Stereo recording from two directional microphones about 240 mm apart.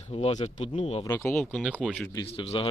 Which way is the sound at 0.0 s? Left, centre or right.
Left.